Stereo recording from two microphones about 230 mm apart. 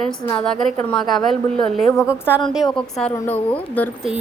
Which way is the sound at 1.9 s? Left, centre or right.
Centre.